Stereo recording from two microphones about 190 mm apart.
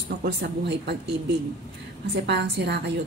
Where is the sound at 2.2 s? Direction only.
65° right (ahead or behind).